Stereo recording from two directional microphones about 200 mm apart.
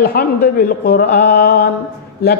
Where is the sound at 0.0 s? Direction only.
50° left (ahead or behind).